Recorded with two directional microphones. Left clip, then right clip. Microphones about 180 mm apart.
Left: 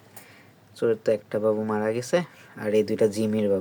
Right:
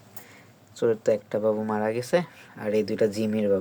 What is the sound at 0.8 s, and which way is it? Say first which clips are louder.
Speech: even; 5° left (ahead or behind).